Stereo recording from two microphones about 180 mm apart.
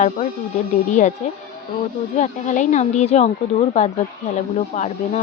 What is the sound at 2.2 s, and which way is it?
Speech, 45° left (ahead or behind).